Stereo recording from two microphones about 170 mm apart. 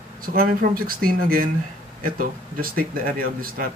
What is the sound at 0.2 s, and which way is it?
A man's voice, 55° right (ahead or behind).